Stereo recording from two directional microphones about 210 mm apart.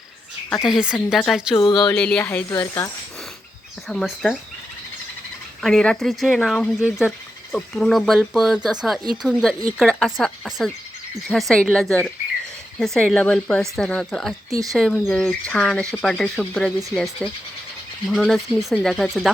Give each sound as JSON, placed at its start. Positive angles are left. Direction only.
{"t": 0.9, "sound": "speech", "side_deg": 5}
{"t": 1.5, "sound": "speech", "side_deg": 20}
{"t": 2.0, "sound": "speech", "side_deg": 5}
{"t": 3.8, "sound": "speech", "side_deg": 0}
{"t": 5.6, "sound": "speech", "side_deg": 5}